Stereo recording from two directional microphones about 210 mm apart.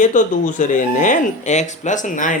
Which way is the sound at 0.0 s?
35° left (ahead or behind).